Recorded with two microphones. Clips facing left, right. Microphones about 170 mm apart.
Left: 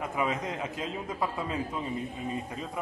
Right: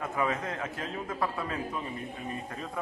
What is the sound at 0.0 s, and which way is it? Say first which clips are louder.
A man's voice: even; 15° left (ahead or behind).